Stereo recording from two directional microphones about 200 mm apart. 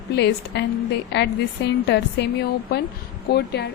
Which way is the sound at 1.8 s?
60° left (ahead or behind).